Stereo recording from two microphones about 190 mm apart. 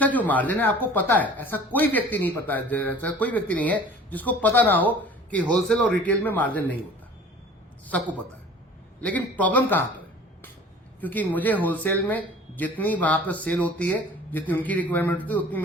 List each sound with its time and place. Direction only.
0.0 s speech: 10° left (ahead or behind)
9.0 s a man's voice: 10° left (ahead or behind)
11.0 s speech: 10° left (ahead or behind)